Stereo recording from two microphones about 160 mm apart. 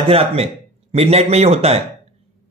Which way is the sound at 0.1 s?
35° right (ahead or behind).